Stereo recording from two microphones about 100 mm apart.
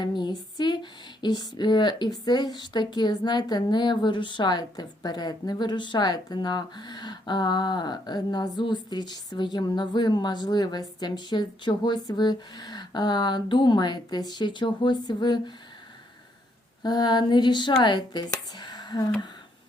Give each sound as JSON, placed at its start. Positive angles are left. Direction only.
{"t": 0.0, "sound": "speech", "side_deg": 50}
{"t": 16.8, "sound": "speech", "side_deg": 45}